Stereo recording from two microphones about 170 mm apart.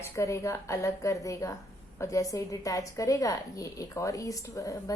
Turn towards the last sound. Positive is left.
turn(degrees=20)  # may be behind; listen again after turning